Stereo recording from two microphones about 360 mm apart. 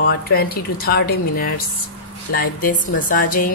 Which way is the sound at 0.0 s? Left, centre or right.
Left.